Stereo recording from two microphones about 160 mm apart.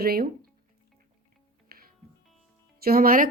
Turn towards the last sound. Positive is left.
turn(degrees=-60)  # may be behind; listen again after turning